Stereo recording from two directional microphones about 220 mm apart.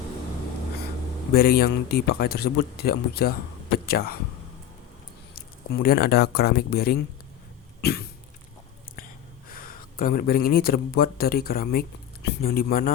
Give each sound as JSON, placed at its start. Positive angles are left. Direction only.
{"t": 1.3, "sound": "speech", "side_deg": 45}
{"t": 5.3, "sound": "a sound", "side_deg": 45}
{"t": 6.3, "sound": "speech", "side_deg": 45}
{"t": 7.8, "sound": "cough", "side_deg": 45}
{"t": 9.5, "sound": "speech", "side_deg": 40}